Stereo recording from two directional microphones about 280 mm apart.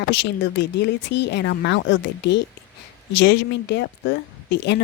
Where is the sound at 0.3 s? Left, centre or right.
Left.